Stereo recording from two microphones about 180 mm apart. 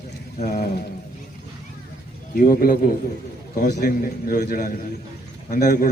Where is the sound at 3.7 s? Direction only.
55° left (ahead or behind).